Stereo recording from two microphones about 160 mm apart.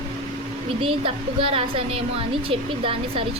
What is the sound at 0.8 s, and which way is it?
A woman's voice, 35° right (ahead or behind).